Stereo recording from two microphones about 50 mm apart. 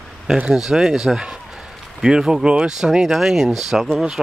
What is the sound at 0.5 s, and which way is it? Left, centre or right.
Speech, centre.